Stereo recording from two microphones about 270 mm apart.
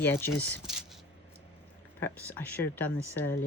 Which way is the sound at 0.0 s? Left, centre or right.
Centre.